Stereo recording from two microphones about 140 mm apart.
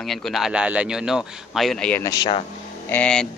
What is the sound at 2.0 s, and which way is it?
Speech, 25° left (ahead or behind).